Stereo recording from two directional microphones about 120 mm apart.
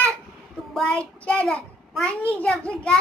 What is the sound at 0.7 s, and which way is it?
A child's voice, 10° left (ahead or behind).